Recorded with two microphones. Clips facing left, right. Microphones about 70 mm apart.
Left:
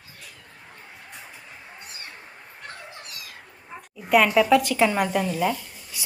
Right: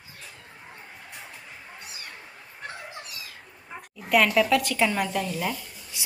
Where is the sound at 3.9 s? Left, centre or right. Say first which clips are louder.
Left 3 dB; centre.